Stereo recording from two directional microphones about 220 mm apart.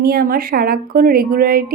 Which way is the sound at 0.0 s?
40° right (ahead or behind).